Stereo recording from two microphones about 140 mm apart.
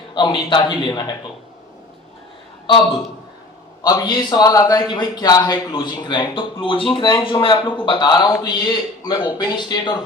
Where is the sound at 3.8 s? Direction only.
30° left (ahead or behind).